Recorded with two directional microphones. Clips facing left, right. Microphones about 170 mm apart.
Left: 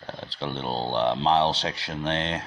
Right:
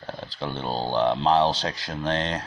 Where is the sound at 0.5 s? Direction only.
25° left (ahead or behind).